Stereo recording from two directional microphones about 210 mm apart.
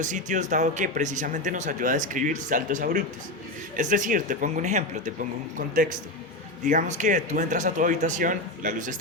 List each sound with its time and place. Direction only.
0.0 s speech: 35° right (ahead or behind)